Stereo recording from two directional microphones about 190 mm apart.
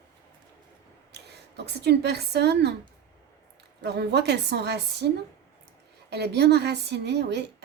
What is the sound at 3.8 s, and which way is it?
A woman's voice, 60° right (ahead or behind).